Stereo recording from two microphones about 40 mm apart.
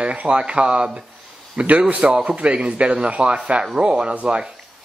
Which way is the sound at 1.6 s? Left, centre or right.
Right.